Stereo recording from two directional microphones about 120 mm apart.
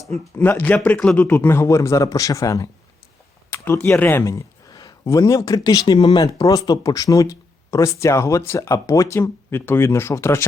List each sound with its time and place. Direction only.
0.3 s speech: 15° left (ahead or behind)
3.5 s a sound: 20° left (ahead or behind)
3.8 s speech: 20° left (ahead or behind)